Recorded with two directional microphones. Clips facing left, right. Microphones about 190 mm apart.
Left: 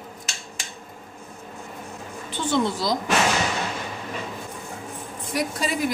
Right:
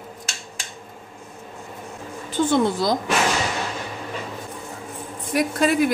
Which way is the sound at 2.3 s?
50° right (ahead or behind).